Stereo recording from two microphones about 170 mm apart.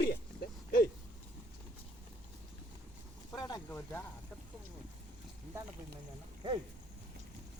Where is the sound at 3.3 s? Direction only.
20° left (ahead or behind).